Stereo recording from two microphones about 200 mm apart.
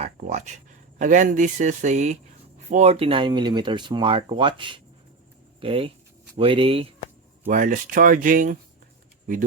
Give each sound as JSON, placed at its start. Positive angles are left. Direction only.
{"t": 0.0, "sound": "speech", "side_deg": -35}
{"t": 7.4, "sound": "speech", "side_deg": -40}